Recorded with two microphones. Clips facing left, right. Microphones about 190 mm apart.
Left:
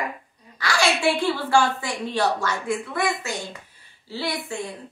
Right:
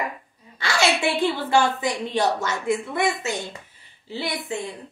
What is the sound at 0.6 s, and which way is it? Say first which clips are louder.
A woman's voice: right 1 dB; 25° right (ahead or behind).